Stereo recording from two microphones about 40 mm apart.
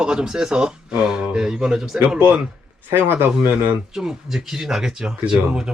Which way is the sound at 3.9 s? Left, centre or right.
Centre.